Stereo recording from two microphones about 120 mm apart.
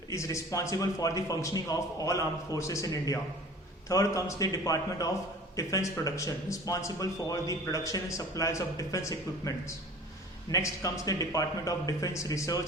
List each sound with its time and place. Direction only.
0.1 s speech: 25° left (ahead or behind)
10.5 s speech: 25° left (ahead or behind)